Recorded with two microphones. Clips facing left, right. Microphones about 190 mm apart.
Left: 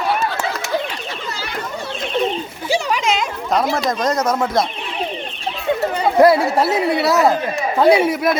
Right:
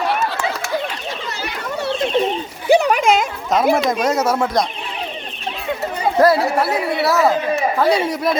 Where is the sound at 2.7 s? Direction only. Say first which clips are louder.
Right 6 dB; 60° right (ahead or behind).